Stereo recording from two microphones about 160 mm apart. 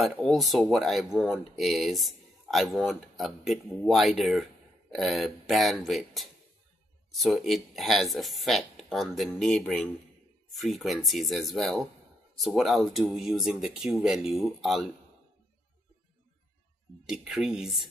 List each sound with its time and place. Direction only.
0.0 s speech: centre (ahead or behind)
17.0 s speech: 5° right (ahead or behind)